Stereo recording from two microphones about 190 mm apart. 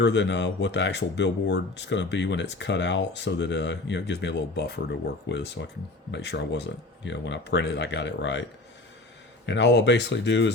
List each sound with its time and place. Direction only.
0.0 s speech: 65° left (ahead or behind)
9.5 s speech: 65° left (ahead or behind)